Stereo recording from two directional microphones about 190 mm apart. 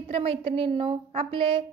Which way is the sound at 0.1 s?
30° right (ahead or behind).